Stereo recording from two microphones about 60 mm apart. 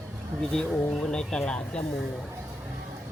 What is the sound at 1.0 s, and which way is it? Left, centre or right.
Speech, centre.